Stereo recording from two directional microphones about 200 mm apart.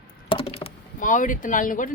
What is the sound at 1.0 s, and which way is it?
Speech, 40° left (ahead or behind).